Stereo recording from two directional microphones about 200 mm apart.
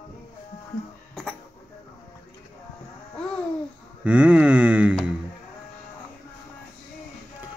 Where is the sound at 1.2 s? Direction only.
5° left (ahead or behind).